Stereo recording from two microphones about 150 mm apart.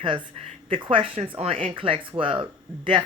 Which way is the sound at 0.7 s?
35° right (ahead or behind).